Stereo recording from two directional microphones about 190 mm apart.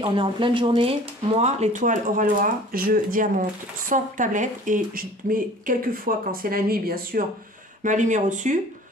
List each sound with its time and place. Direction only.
0.0 s speech: 25° right (ahead or behind)